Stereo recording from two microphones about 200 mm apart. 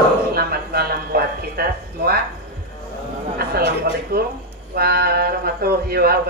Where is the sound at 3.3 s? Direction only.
50° right (ahead or behind).